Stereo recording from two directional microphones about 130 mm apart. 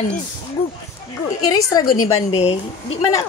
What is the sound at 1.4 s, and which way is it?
Speech, 25° left (ahead or behind).